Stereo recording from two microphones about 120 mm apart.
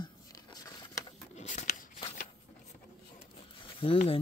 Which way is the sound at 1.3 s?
80° left.